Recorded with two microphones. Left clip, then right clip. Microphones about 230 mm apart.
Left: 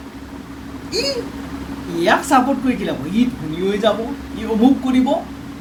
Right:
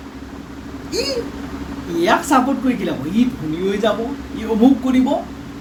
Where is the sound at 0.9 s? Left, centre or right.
Centre.